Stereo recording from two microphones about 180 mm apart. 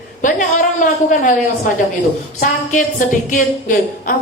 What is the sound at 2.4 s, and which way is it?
A man's voice, 45° left (ahead or behind).